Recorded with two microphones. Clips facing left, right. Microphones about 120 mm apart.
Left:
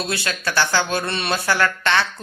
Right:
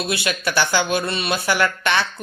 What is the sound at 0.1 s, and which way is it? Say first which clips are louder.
Speech: right 2 dB; 15° right (ahead or behind).